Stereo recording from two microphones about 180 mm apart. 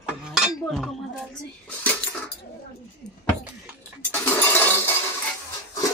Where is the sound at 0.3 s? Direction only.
Centre (ahead or behind).